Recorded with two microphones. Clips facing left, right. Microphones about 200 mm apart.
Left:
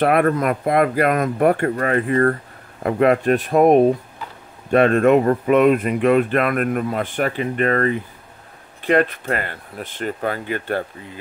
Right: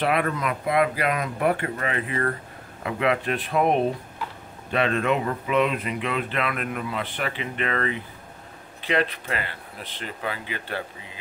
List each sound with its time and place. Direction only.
0.0 s speech: 50° left (ahead or behind)